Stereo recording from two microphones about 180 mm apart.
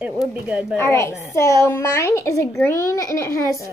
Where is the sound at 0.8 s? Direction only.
15° left (ahead or behind).